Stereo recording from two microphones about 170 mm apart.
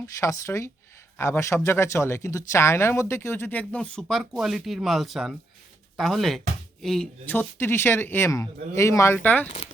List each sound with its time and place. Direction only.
0.0 s speech: 15° left (ahead or behind)